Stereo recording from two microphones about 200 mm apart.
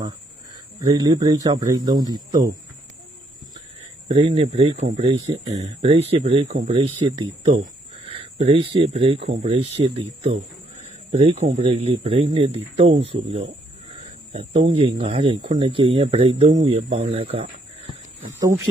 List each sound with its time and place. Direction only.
0.8 s speech: 20° right (ahead or behind)
4.1 s speech: 30° right (ahead or behind)
8.0 s speech: 30° right (ahead or behind)
16.5 s speech: 35° right (ahead or behind)